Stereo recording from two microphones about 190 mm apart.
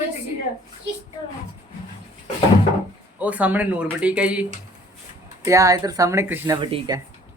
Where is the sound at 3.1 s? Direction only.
10° right (ahead or behind).